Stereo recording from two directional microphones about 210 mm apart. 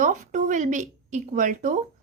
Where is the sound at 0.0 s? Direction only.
35° right (ahead or behind).